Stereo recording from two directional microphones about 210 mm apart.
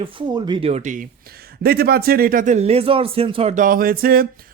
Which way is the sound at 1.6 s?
45° right (ahead or behind).